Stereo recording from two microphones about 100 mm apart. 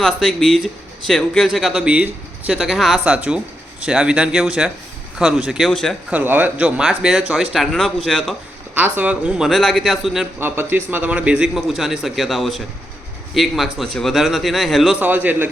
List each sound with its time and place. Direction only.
0.0 s a man's voice: 5° left (ahead or behind)
6.1 s speech: 15° right (ahead or behind); by 8.4 s centre (ahead or behind)
8.7 s a man's voice: 15° right (ahead or behind)
9.5 s speech: centre (ahead or behind)
10.4 s a man's voice: 20° right (ahead or behind); by 14.9 s centre (ahead or behind)
14.9 s a man's voice: 15° right (ahead or behind)